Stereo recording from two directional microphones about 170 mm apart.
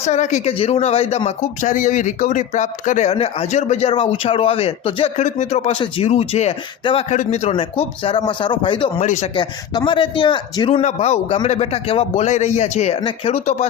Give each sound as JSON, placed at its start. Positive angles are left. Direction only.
{"t": 0.0, "sound": "speech", "side_deg": 40}
{"t": 5.2, "sound": "speech", "side_deg": 45}
{"t": 9.0, "sound": "a man's voice", "side_deg": 45}
{"t": 9.3, "sound": "a man's voice", "side_deg": 30}